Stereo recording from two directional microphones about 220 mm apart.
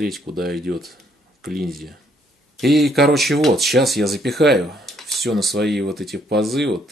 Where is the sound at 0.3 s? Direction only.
40° right (ahead or behind).